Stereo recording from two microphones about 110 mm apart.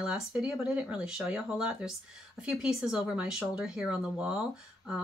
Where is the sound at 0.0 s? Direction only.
5° right (ahead or behind).